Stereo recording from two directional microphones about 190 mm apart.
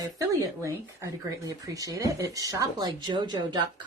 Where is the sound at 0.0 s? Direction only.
15° right (ahead or behind).